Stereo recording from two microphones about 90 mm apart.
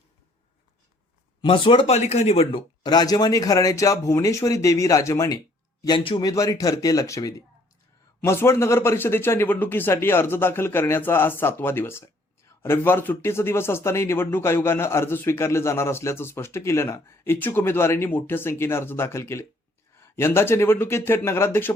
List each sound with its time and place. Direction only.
1.4 s speech: 70° left (ahead or behind)
2.8 s speech: 50° left (ahead or behind); by 5.4 s 35° left (ahead or behind)
6.0 s speech: 75° left (ahead or behind)
6.2 s speech: 40° left (ahead or behind)
8.2 s speech: 30° left (ahead or behind)